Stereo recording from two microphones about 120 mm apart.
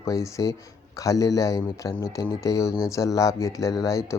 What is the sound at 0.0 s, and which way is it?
Speech, 25° left (ahead or behind).